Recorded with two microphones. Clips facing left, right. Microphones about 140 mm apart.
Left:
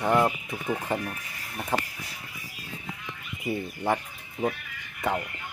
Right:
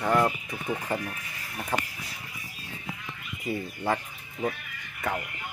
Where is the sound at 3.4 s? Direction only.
20° left (ahead or behind).